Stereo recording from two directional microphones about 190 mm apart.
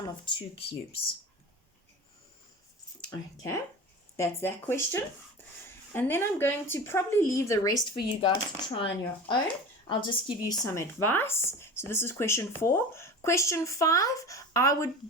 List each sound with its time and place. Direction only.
0.3 s speech: 30° left (ahead or behind)
3.1 s speech: 15° left (ahead or behind)